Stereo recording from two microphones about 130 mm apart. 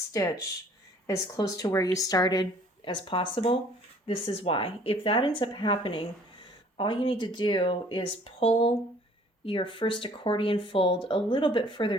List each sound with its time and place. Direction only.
0.1 s speech: 25° left (ahead or behind)